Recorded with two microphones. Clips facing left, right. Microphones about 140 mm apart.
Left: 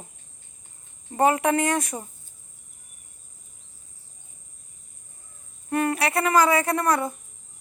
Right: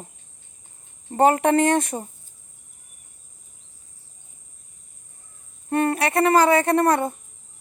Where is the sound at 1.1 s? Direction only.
35° right (ahead or behind).